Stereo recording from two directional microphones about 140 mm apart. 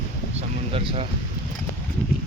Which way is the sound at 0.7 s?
45° right (ahead or behind).